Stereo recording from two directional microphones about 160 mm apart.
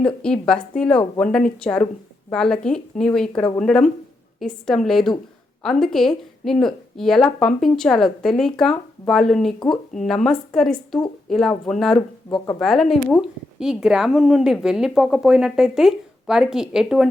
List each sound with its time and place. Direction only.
0.0 s a woman's voice: 5° left (ahead or behind)